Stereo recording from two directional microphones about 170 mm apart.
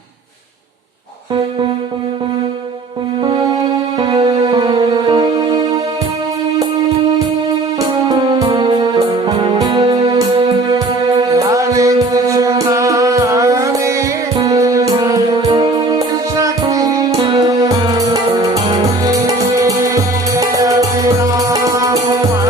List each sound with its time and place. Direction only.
3.2 s music: 25° right (ahead or behind)
8.0 s music: 25° right (ahead or behind)
9.0 s music: 35° right (ahead or behind); by 21.9 s 20° right (ahead or behind)